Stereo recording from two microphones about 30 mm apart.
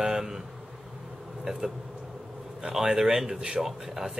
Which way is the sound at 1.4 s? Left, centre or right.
Right.